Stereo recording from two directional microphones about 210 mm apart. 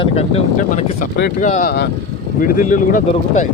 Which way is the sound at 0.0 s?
30° left (ahead or behind).